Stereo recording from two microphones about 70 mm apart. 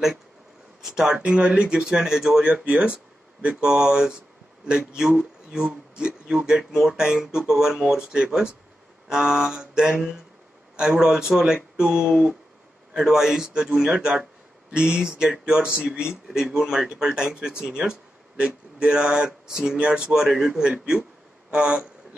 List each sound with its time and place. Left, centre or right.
0.8 s speech: centre
2.5 s speech: centre